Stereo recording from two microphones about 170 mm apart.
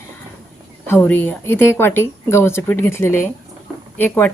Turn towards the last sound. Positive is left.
turn(degrees=10)  # may be behind; listen again after turning